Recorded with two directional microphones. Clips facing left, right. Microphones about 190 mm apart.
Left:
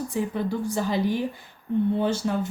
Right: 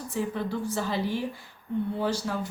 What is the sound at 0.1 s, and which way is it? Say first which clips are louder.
Speech: left 2 dB; 15° left (ahead or behind).